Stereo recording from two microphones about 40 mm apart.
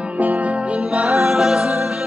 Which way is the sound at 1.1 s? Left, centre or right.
Centre.